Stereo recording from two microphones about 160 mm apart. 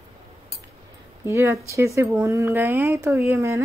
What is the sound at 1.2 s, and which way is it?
Speech, 15° right (ahead or behind).